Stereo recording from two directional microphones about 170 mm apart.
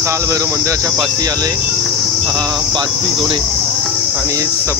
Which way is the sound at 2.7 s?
25° right (ahead or behind).